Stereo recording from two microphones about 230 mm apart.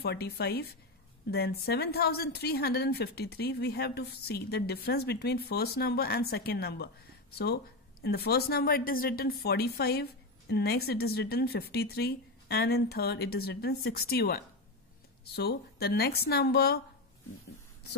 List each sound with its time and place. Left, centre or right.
0.0 s a woman's voice: left